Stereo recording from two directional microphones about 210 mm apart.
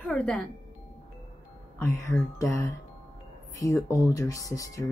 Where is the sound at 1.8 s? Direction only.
10° left (ahead or behind).